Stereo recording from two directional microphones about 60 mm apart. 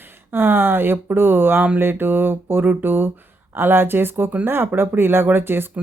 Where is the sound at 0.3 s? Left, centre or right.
Right.